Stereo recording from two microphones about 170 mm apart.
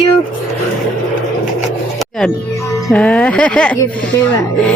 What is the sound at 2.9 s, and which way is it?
Speech, 5° left (ahead or behind).